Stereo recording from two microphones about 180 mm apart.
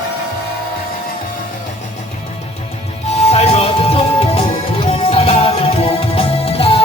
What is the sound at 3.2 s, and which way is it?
Music, 35° left (ahead or behind).